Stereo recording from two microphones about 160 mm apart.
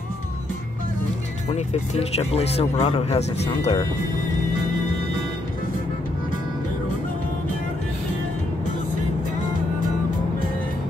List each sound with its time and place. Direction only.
1.5 s speech: 40° left (ahead or behind)